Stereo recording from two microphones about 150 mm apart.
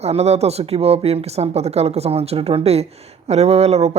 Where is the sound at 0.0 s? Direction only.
45° right (ahead or behind).